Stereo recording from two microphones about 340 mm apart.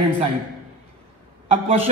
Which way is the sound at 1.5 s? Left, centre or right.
Centre.